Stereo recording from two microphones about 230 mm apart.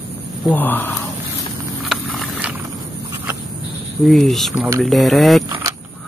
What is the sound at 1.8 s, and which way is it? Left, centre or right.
Horse, centre.